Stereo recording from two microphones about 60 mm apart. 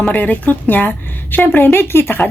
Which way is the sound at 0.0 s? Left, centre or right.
Left.